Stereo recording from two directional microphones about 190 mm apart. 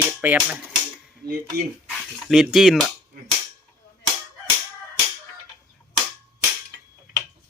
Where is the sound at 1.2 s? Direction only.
55° right (ahead or behind).